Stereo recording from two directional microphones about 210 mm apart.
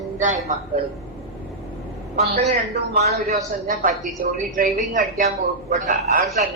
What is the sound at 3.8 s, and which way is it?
A man's voice, 35° right (ahead or behind).